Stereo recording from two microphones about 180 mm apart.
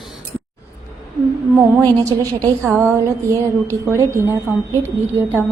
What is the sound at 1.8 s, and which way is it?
A woman's voice, 20° right (ahead or behind).